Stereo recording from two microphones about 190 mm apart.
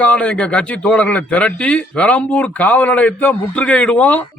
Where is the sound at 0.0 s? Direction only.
5° left (ahead or behind).